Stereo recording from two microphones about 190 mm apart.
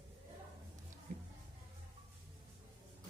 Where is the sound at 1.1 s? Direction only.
40° right (ahead or behind).